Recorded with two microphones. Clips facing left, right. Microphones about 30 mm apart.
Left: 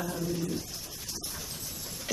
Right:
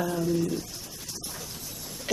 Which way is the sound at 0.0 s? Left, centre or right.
Right.